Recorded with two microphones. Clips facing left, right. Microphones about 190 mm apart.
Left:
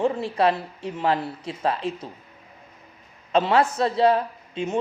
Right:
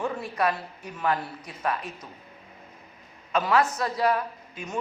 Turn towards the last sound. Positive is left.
turn(degrees=25)  # may be behind; listen again after turning